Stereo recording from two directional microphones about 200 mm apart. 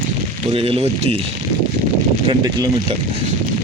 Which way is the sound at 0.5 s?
30° right (ahead or behind).